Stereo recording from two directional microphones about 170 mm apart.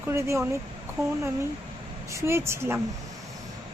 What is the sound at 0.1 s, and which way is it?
Speech, 15° right (ahead or behind).